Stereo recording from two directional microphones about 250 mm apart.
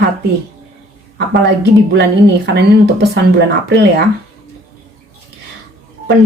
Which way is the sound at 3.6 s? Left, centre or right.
Right.